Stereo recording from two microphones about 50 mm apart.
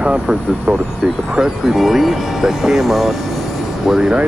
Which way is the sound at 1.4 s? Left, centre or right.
Centre.